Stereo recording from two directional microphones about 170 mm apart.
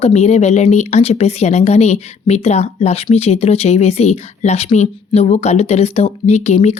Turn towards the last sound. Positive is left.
turn(degrees=40)  # may be behind; listen again after turning